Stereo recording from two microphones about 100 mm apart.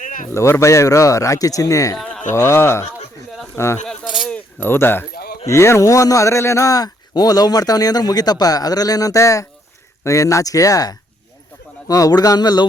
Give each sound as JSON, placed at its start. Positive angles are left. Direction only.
{"t": 0.3, "sound": "a man's voice", "side_deg": 30}
{"t": 4.0, "sound": "speech", "side_deg": -5}
{"t": 4.3, "sound": "a man's voice", "side_deg": 20}